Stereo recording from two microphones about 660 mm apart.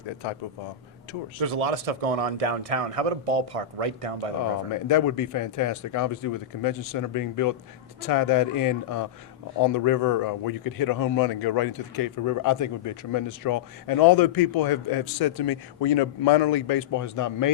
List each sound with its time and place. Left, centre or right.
1.4 s a man's voice: right
4.7 s speech: left